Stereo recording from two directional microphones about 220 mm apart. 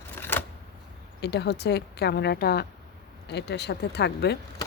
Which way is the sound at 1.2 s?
50° left (ahead or behind).